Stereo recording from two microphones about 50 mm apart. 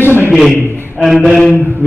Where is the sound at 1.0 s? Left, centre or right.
Centre.